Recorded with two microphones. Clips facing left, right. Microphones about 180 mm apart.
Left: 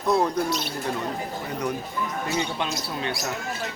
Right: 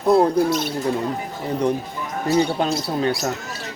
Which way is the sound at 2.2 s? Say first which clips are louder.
Right 12 dB; 35° right (ahead or behind).